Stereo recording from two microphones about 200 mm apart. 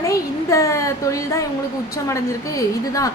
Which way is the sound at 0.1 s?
15° left (ahead or behind).